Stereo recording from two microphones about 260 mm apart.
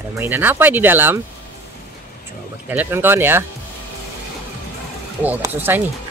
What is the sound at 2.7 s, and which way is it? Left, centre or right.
Speech, centre.